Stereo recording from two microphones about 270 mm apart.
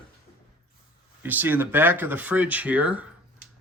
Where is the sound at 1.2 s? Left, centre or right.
Centre.